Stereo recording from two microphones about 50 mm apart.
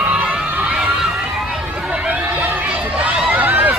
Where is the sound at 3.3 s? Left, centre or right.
Right.